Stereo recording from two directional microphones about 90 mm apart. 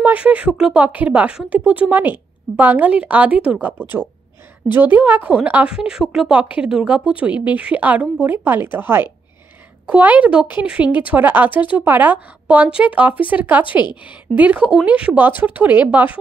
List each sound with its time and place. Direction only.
0.0 s a woman's voice: 15° right (ahead or behind)
4.7 s a woman's voice: 20° right (ahead or behind)